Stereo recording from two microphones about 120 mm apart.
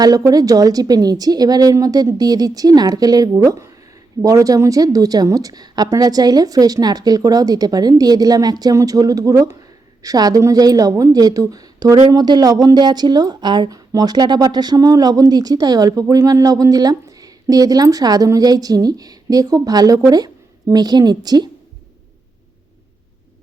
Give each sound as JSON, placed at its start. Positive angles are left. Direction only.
{"t": 0.0, "sound": "a woman's voice", "side_deg": -30}